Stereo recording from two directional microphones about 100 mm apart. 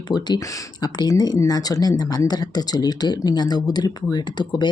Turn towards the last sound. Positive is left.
turn(degrees=45)  # may be behind; listen again after turning